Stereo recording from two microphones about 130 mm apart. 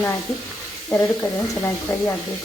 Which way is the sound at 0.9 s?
10° left (ahead or behind).